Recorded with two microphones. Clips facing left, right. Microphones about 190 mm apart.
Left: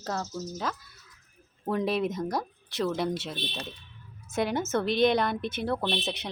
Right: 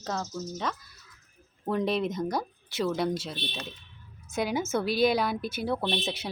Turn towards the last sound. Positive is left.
turn(degrees=0)  # may be behind; listen again after turning